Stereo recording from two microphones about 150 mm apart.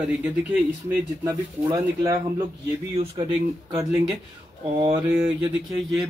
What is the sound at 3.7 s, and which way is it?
Speech, 20° right (ahead or behind).